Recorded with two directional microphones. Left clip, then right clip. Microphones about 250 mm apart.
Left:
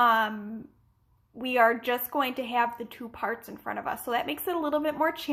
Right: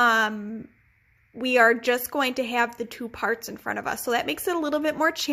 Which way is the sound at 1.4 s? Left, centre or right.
Right.